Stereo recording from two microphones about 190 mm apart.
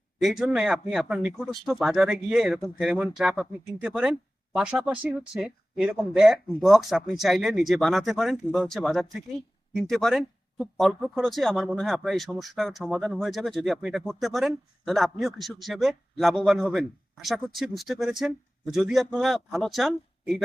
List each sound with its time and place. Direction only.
0.2 s speech: centre (ahead or behind)